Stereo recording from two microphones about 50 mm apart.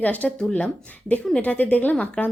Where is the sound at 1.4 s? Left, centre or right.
Left.